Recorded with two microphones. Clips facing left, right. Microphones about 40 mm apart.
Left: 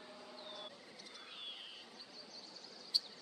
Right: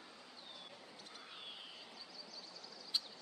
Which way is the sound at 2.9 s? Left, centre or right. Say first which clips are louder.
Left 1 dB; right.